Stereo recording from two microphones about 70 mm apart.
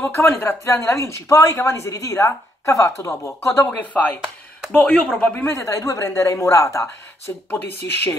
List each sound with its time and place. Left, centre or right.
0.1 s speech: left
3.7 s speech: left
5.5 s speech: left
7.5 s speech: left